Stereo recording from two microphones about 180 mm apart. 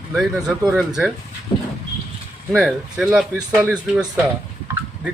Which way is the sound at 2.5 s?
Centre (ahead or behind).